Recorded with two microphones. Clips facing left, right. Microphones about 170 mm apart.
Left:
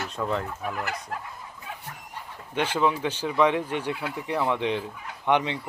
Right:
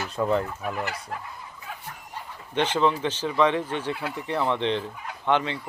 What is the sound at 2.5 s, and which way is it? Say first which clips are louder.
Speech: right 2 dB; 10° left (ahead or behind).